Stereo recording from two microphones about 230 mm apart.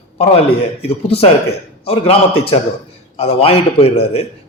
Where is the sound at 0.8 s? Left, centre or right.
Left.